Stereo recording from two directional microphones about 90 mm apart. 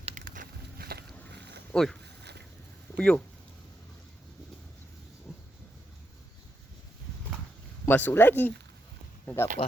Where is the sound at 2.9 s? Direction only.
15° left (ahead or behind).